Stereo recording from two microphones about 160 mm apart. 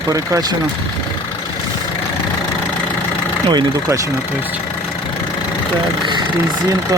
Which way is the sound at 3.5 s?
25° right (ahead or behind).